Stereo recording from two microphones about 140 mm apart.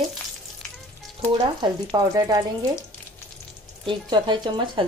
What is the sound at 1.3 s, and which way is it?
Speech, 30° right (ahead or behind).